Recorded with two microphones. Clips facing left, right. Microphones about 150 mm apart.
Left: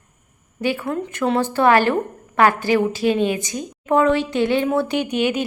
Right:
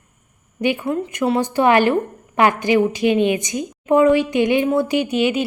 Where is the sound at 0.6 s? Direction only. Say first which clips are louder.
Right 2 dB; 15° right (ahead or behind).